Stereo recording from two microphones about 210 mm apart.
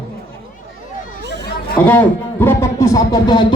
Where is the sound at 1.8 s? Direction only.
10° left (ahead or behind).